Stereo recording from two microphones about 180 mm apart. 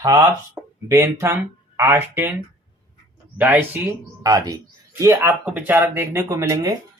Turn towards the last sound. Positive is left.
turn(degrees=-20)  # may be behind; listen again after turning